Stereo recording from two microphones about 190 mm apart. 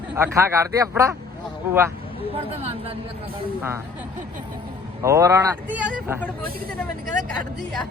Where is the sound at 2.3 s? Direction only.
35° right (ahead or behind).